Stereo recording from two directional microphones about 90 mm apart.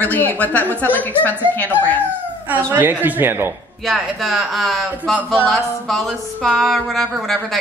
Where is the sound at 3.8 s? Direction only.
Centre (ahead or behind).